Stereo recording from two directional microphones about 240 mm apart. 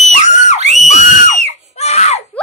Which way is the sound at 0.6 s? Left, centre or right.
Right.